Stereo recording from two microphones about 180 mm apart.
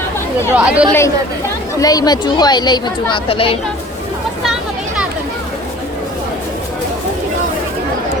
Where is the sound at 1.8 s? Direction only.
20° left (ahead or behind).